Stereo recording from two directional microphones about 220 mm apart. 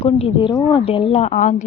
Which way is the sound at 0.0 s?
25° left (ahead or behind).